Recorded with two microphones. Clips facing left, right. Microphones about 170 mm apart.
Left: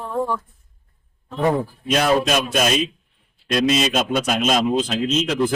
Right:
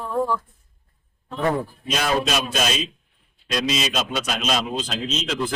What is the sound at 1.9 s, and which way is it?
A man's voice, 50° left (ahead or behind).